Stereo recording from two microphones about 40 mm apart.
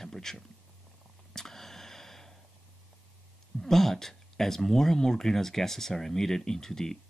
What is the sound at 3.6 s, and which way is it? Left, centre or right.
Speech, centre.